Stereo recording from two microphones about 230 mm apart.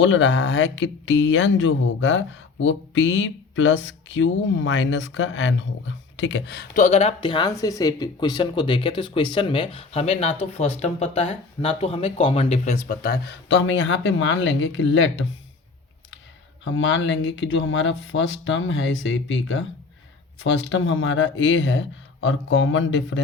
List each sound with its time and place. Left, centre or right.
0.0 s speech: left
16.6 s speech: left